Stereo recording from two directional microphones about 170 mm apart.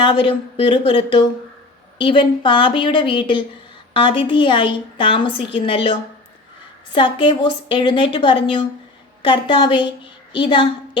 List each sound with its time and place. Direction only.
0.0 s a woman's voice: 30° left (ahead or behind)